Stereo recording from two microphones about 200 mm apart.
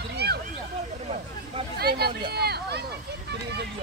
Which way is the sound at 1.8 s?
50° right (ahead or behind).